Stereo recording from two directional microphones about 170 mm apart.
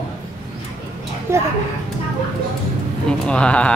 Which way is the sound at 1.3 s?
15° right (ahead or behind).